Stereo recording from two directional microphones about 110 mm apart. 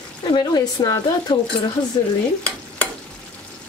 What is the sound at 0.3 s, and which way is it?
Speech, 45° left (ahead or behind).